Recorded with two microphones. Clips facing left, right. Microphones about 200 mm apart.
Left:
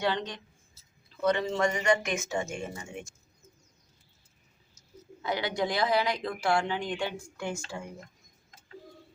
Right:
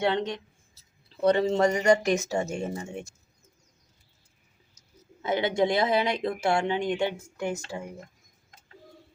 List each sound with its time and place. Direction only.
0.0 s speech: 25° right (ahead or behind)
5.2 s speech: 25° right (ahead or behind)